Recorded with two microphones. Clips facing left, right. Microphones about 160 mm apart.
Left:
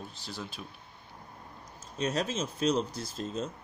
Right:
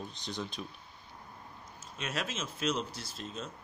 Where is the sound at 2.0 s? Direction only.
35° left (ahead or behind).